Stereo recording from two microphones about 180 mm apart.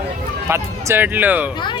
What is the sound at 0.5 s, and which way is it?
Speech, 15° right (ahead or behind).